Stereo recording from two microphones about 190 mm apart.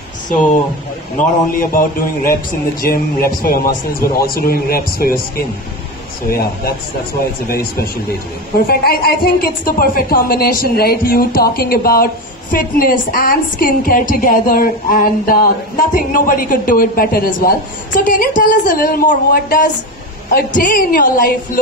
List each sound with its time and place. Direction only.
1.1 s speech: 50° left (ahead or behind)
7.5 s speech: 55° left (ahead or behind)